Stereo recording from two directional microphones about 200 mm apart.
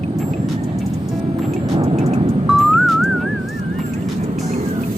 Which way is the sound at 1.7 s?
30° right (ahead or behind).